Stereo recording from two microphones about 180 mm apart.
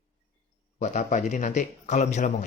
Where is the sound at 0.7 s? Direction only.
40° left (ahead or behind).